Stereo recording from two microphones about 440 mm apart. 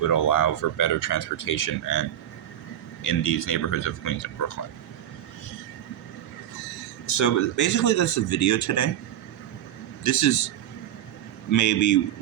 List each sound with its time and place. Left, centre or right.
0.1 s speech: left
3.0 s speech: left
7.2 s speech: left
10.0 s speech: left
11.5 s speech: left